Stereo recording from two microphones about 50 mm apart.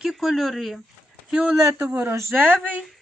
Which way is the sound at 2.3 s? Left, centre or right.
Right.